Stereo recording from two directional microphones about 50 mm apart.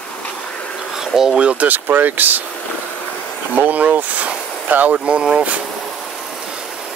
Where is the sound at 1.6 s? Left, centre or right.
Right.